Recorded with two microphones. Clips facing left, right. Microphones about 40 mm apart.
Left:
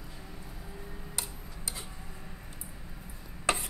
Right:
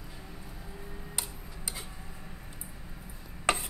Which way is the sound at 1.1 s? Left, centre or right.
Centre.